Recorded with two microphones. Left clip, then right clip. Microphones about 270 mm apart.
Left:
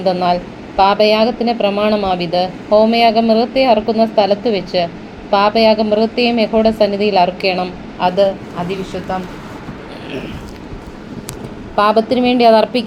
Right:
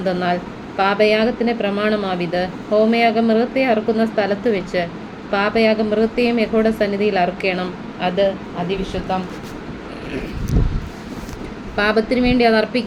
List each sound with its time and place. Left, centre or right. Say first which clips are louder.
0.0 s speech: left 5 dB; centre
11.9 s speech: left 3 dB; centre
12.4 s a woman's voice: left 7 dB; centre